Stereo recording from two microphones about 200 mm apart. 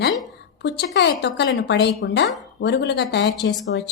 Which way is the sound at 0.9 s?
60° left (ahead or behind).